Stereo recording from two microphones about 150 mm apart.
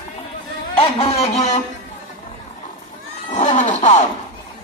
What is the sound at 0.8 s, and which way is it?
Speech, 40° left (ahead or behind).